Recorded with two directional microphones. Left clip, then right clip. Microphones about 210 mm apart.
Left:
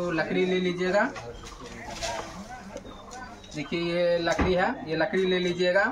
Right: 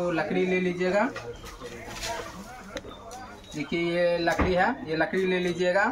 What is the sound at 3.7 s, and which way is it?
Speech, centre (ahead or behind).